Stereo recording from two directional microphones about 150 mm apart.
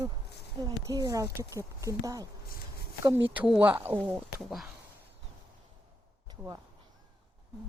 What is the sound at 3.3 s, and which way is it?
Speech, 10° right (ahead or behind).